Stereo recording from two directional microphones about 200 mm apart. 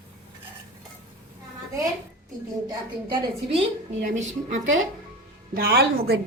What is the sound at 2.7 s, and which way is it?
A woman's voice, 25° right (ahead or behind).